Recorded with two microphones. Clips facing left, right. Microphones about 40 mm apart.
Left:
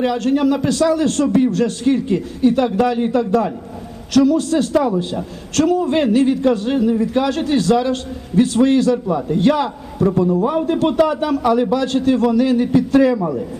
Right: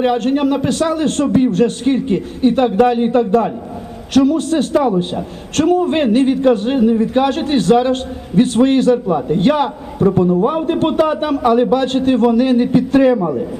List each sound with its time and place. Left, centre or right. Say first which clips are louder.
0.0 s a man's voice: right 2 dB; right